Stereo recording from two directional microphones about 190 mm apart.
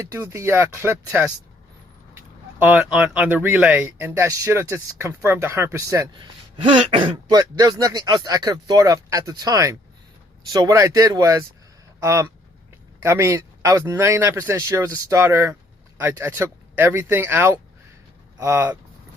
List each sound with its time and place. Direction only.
0.0 s speech: 15° right (ahead or behind)
2.6 s speech: 10° right (ahead or behind)
6.6 s speech: 25° right (ahead or behind)